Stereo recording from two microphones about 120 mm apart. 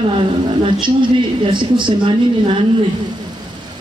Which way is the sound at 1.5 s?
40° right (ahead or behind).